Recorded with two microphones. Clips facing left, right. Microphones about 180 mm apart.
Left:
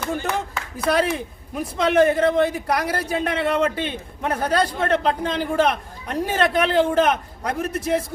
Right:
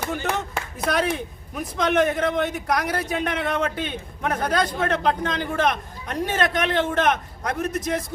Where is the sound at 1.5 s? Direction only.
30° left (ahead or behind).